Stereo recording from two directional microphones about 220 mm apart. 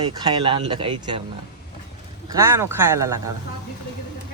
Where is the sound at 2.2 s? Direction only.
15° right (ahead or behind).